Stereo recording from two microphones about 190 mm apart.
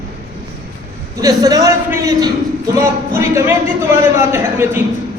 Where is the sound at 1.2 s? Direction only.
20° right (ahead or behind).